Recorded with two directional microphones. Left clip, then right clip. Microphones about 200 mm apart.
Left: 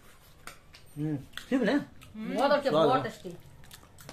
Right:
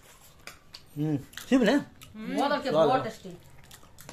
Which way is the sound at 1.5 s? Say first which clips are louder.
Right 4 dB; 35° right (ahead or behind).